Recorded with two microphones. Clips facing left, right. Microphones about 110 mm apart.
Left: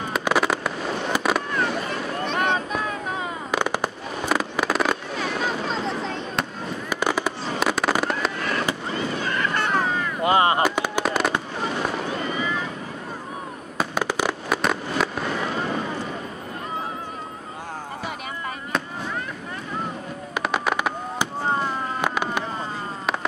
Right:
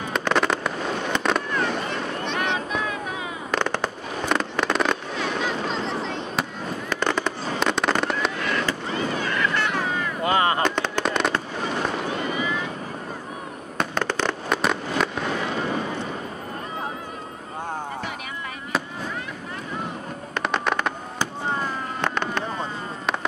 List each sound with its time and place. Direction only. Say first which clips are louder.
0.1 s fireworks: even; 5° left (ahead or behind)
1.5 s boat: even; 40° left (ahead or behind)
3.5 s fireworks: even; 10° left (ahead or behind)
5.1 s a sound: even; 45° left (ahead or behind)
6.9 s fireworks: left 1 dB; 10° left (ahead or behind)
8.4 s fireworks: even; 40° left (ahead or behind)
9.2 s a sound: even; 35° left (ahead or behind)
10.2 s fireworks: left 3 dB; 20° left (ahead or behind)
10.6 s fireworks: left 1 dB; 10° left (ahead or behind)
12.4 s vehicle: even; 40° left (ahead or behind)
13.7 s fireworks: left 1 dB; 10° left (ahead or behind)
20.4 s fireworks: even; 5° left (ahead or behind)
22.0 s a sound: even; 10° left (ahead or behind)